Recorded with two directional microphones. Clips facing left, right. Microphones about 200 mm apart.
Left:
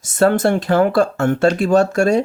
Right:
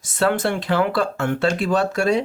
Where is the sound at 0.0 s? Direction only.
45° left (ahead or behind).